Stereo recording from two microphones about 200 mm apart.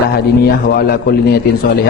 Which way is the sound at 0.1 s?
50° left (ahead or behind).